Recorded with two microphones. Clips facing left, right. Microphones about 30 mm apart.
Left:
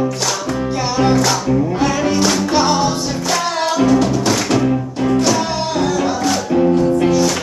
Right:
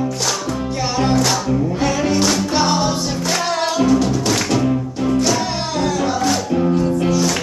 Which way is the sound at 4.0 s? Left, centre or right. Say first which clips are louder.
Left 2 dB; centre.